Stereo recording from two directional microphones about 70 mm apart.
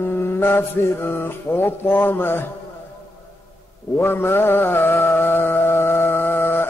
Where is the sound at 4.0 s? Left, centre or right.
Left.